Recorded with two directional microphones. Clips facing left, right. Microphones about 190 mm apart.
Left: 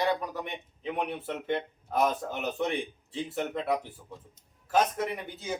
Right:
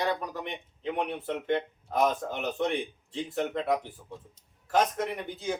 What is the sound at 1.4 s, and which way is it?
Speech, 5° left (ahead or behind).